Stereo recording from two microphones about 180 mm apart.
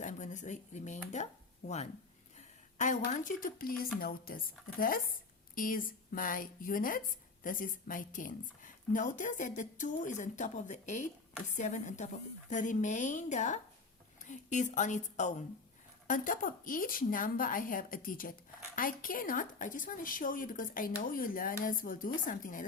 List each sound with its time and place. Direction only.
0.0 s a woman's voice: 45° left (ahead or behind)